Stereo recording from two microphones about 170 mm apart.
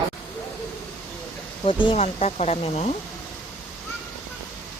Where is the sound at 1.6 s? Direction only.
30° left (ahead or behind).